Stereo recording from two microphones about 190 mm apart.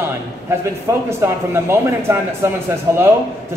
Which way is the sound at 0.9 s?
15° right (ahead or behind).